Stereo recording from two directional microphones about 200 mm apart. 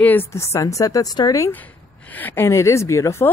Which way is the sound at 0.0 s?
10° left (ahead or behind).